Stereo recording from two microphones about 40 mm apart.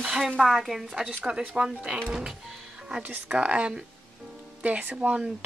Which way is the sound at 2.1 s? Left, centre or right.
Centre.